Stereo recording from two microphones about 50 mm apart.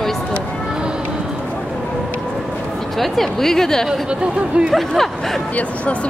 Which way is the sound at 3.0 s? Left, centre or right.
Centre.